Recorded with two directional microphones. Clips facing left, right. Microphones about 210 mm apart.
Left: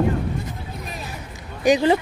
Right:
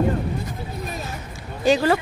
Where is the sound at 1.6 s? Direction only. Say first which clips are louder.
Left 1 dB; 20° left (ahead or behind).